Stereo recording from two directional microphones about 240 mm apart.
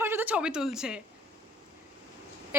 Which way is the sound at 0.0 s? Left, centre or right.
Centre.